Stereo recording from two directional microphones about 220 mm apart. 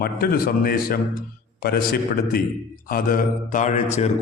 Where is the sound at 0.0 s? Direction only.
45° left (ahead or behind).